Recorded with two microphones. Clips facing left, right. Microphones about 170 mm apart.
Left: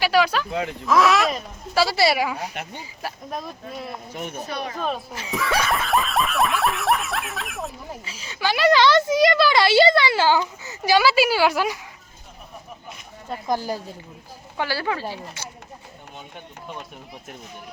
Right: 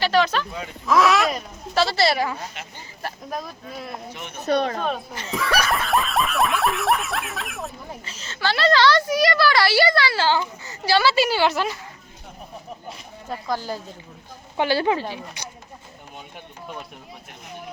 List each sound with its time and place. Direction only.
0.0 s speech: 10° left (ahead or behind)
2.6 s speech: 55° left (ahead or behind)
3.0 s speech: centre (ahead or behind)
4.1 s speech: 45° left (ahead or behind)
4.8 s speech: 5° left (ahead or behind)
5.6 s snicker: centre (ahead or behind)
13.5 s snicker: 10° left (ahead or behind)
14.5 s speech: 20° right (ahead or behind)